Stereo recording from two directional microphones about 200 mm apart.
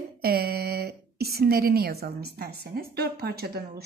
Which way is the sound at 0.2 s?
50° right (ahead or behind).